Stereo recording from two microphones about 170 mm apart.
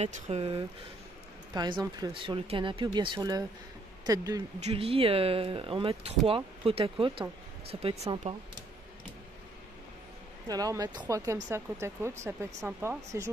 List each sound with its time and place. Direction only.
0.0 s speech: 35° right (ahead or behind)
1.5 s speech: 25° right (ahead or behind)
4.6 s speech: 35° right (ahead or behind)
10.5 s speech: 20° right (ahead or behind)